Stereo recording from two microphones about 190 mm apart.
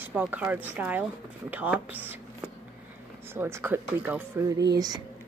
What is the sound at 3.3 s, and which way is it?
Speech, 10° right (ahead or behind).